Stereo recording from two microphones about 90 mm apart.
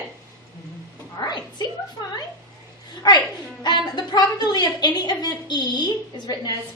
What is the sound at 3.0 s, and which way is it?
A woman's voice, 50° left (ahead or behind).